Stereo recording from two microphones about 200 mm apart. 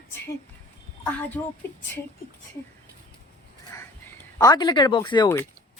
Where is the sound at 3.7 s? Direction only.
15° left (ahead or behind).